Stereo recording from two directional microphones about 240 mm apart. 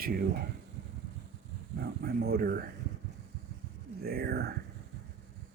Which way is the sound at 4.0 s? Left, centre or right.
Right.